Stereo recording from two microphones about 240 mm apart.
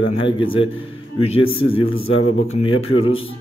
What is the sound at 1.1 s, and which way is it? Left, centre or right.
Speech, left.